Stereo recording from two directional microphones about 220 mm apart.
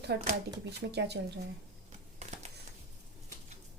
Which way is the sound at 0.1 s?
50° right (ahead or behind).